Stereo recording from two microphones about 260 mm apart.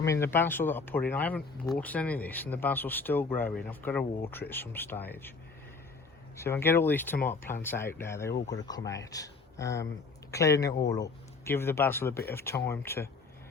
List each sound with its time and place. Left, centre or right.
0.0 s speech: centre
6.3 s speech: centre